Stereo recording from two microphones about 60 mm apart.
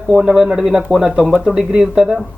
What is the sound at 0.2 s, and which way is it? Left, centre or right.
Speech, centre.